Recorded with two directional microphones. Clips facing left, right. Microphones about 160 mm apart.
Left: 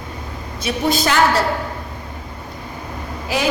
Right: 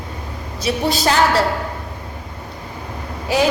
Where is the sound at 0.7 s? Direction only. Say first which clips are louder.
Right 3 dB; 30° right (ahead or behind).